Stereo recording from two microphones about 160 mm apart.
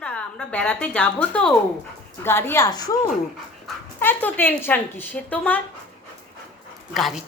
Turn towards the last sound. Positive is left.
turn(degrees=0)  # may be behind; listen again after turning